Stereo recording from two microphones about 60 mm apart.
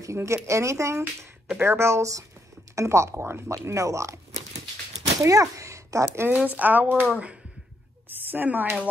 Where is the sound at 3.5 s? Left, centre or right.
Right.